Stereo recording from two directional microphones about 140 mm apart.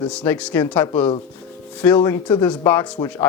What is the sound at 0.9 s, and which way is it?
Speech, 40° left (ahead or behind).